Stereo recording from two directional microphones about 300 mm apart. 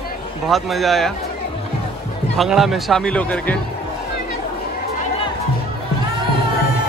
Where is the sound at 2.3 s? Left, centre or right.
Centre.